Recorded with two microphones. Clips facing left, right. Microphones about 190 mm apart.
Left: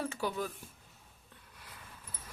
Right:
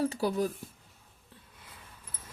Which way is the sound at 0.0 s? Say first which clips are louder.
Right 7 dB; 35° right (ahead or behind).